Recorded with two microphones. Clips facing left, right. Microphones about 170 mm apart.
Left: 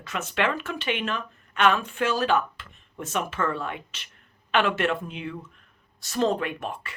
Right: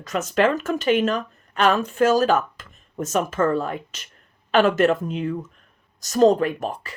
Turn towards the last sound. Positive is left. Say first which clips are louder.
# right 6 dB
turn(degrees=-35)  # may be behind; listen again after turning